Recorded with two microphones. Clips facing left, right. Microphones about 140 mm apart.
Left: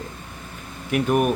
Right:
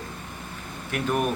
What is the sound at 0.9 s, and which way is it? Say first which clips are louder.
Speech: left 6 dB; 15° left (ahead or behind).